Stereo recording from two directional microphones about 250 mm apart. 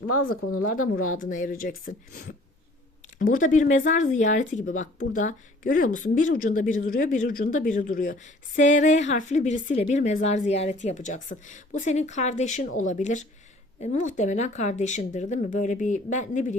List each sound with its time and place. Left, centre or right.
0.6 s speech: left